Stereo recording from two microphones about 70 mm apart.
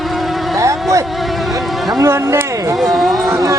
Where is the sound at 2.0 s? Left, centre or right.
Right.